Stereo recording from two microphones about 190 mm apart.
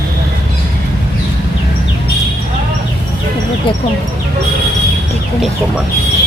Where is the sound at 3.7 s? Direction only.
25° left (ahead or behind).